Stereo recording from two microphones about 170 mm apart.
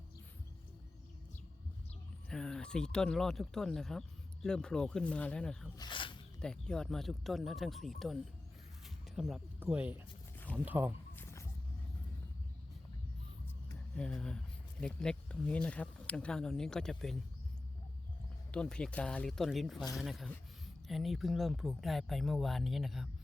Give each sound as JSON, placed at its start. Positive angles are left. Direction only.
{"t": 2.3, "sound": "speech", "side_deg": 5}
{"t": 5.7, "sound": "snake", "side_deg": 25}
{"t": 6.4, "sound": "speech", "side_deg": 5}
{"t": 10.3, "sound": "a sound", "side_deg": 10}
{"t": 10.7, "sound": "speech", "side_deg": -10}
{"t": 11.1, "sound": "a sound", "side_deg": 15}
{"t": 13.9, "sound": "speech", "side_deg": 5}
{"t": 18.5, "sound": "speech", "side_deg": 5}